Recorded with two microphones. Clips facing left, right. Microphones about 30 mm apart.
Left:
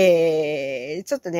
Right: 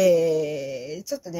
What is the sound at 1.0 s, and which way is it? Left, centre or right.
Speech, left.